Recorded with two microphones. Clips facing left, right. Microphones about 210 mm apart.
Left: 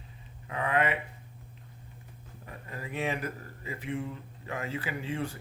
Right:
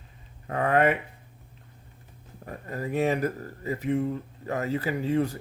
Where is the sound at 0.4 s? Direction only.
45° right (ahead or behind).